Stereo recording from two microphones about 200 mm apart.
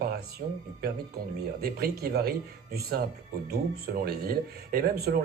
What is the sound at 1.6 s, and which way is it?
Speech, 50° right (ahead or behind).